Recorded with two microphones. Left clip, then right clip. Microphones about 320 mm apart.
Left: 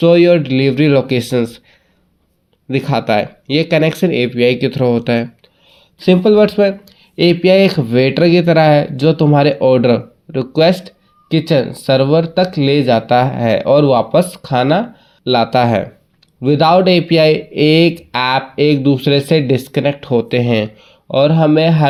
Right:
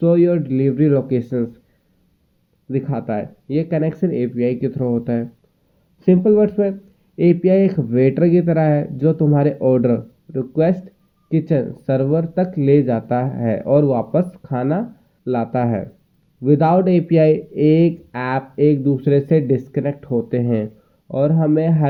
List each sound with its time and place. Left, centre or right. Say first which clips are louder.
0.0 s speech: left 6 dB; centre
2.6 s speech: left 8 dB; centre